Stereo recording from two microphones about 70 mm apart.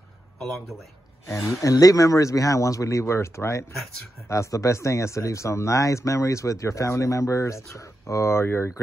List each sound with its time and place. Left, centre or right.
0.4 s a man's voice: centre
1.5 s speech: left